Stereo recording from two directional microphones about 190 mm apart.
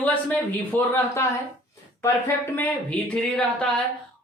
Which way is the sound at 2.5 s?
10° left (ahead or behind).